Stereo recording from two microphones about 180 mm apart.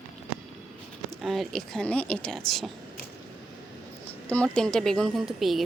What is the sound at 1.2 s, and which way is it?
A woman's voice, centre (ahead or behind).